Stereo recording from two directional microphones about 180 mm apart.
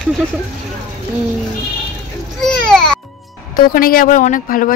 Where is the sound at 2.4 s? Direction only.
5° left (ahead or behind).